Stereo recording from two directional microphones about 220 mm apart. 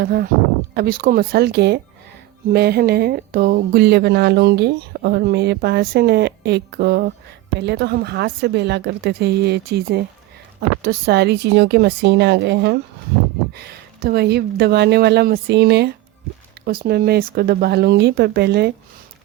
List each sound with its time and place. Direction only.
0.0 s speech: 45° right (ahead or behind)